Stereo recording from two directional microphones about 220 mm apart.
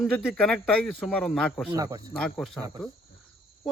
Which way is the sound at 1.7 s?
15° right (ahead or behind).